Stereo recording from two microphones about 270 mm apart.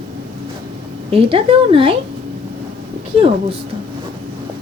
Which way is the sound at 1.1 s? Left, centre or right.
Right.